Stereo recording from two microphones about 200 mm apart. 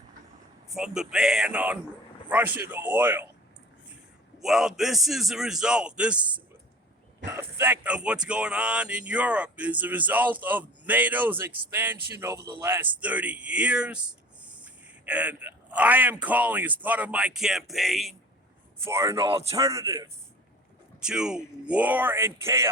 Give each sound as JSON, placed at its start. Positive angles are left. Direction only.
{"t": 0.7, "sound": "a man's voice", "side_deg": -5}
{"t": 4.4, "sound": "a man's voice", "side_deg": 0}
{"t": 7.3, "sound": "speech", "side_deg": -15}
{"t": 15.0, "sound": "speech", "side_deg": -5}
{"t": 18.9, "sound": "speech", "side_deg": -15}
{"t": 21.0, "sound": "speech", "side_deg": -5}